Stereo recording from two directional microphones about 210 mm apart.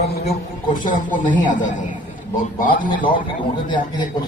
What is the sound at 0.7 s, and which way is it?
Speech, 40° left (ahead or behind).